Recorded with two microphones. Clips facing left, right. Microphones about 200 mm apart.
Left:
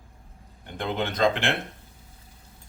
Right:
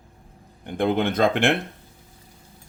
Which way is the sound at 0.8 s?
50° right (ahead or behind).